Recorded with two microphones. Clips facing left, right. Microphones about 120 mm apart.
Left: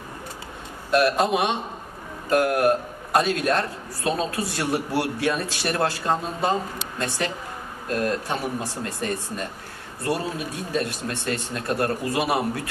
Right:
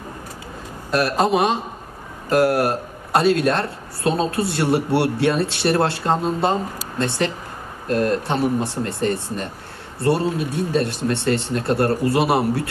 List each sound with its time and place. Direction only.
0.9 s a man's voice: 35° right (ahead or behind)